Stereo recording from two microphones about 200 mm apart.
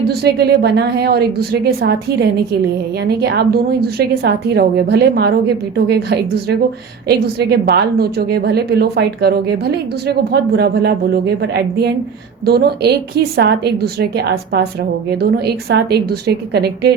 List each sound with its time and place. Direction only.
0.1 s speech: 55° right (ahead or behind)
3.0 s a woman's voice: 55° right (ahead or behind)